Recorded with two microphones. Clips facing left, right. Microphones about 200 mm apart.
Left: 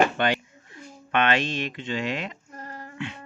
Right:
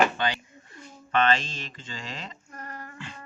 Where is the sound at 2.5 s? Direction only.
25° left (ahead or behind).